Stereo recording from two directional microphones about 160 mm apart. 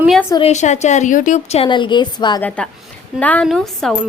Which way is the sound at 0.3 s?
45° left (ahead or behind).